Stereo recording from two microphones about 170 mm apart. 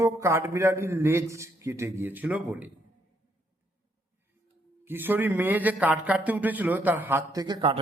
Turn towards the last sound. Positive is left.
turn(degrees=-25)  # may be behind; listen again after turning